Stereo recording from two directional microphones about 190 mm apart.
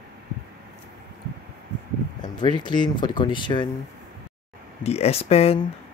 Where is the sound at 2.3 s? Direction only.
25° left (ahead or behind).